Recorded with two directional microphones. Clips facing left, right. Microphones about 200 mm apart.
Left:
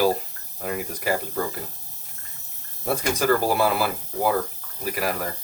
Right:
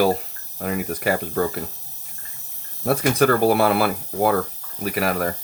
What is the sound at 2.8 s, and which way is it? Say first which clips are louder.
Speech: right 4 dB; 60° right (ahead or behind).